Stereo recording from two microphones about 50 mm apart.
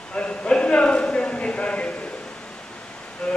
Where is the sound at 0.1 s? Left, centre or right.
Left.